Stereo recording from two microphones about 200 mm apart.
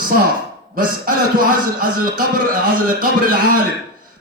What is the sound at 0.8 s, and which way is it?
Speech, 45° right (ahead or behind).